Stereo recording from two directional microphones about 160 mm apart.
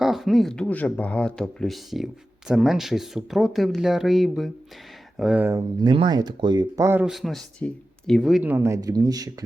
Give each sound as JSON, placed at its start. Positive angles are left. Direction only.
{"t": 0.0, "sound": "speech", "side_deg": 0}
{"t": 5.5, "sound": "speech", "side_deg": -30}
{"t": 7.0, "sound": "speech", "side_deg": 0}